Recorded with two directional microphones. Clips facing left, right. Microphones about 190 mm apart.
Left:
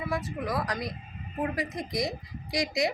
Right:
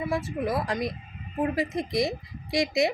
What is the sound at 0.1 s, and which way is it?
Speech, 25° right (ahead or behind).